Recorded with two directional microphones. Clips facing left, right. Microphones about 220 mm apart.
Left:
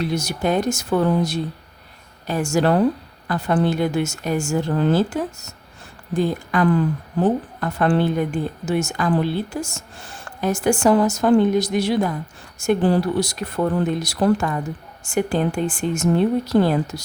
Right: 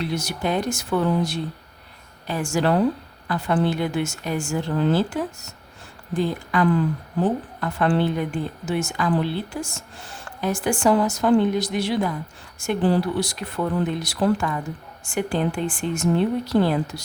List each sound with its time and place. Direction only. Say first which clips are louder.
0.0 s speech: left 3 dB; 45° left (ahead or behind)